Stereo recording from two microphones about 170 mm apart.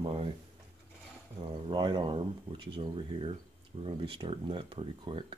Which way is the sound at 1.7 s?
25° right (ahead or behind).